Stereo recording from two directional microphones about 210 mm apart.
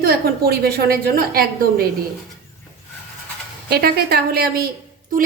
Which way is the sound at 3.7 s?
45° right (ahead or behind).